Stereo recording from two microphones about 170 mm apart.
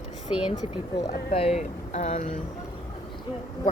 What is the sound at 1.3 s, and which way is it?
Speech, 35° left (ahead or behind).